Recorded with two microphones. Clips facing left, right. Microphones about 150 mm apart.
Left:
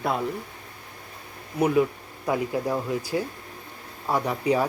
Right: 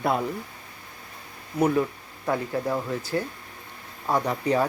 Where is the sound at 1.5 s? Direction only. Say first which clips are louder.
Left 1 dB; 10° left (ahead or behind).